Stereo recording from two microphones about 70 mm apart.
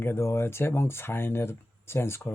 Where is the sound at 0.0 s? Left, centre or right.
Left.